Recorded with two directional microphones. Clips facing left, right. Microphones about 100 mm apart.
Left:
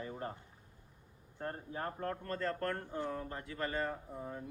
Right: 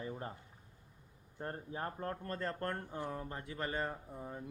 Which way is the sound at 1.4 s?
20° right (ahead or behind).